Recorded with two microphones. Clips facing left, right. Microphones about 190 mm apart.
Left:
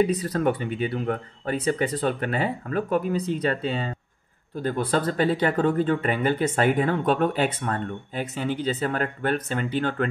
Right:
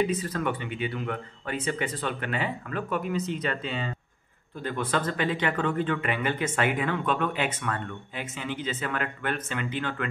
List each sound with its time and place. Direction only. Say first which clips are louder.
0.0 s speech: left 5 dB; 35° left (ahead or behind)